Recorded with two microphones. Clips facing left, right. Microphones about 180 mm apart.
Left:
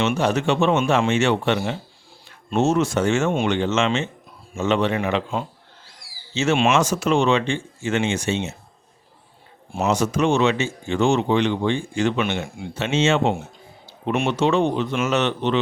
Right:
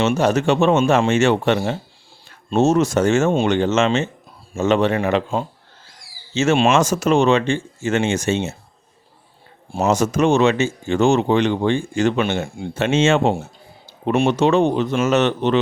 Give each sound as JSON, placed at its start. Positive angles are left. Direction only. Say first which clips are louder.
{"t": 0.2, "sound": "speech", "louder": "right 3 dB", "side_deg": -45}
{"t": 9.8, "sound": "speech", "louder": "right 3 dB", "side_deg": -45}